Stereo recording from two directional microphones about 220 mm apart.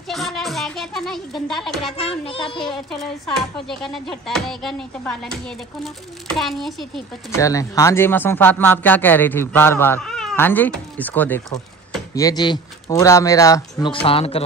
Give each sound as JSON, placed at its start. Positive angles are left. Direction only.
{"t": 0.1, "sound": "music", "side_deg": 0}
{"t": 2.0, "sound": "a child's voice", "side_deg": 25}
{"t": 2.7, "sound": "speech", "side_deg": 0}
{"t": 7.3, "sound": "speech", "side_deg": 15}